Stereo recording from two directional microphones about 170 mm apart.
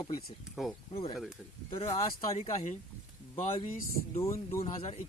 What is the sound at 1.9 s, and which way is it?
Speech, 35° left (ahead or behind).